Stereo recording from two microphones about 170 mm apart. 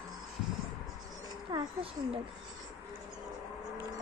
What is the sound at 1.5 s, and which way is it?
Speech, 30° right (ahead or behind).